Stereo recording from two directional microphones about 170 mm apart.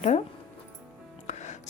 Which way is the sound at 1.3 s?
40° left (ahead or behind).